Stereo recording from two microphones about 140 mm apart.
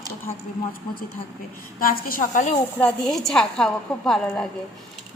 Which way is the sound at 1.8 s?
90° left.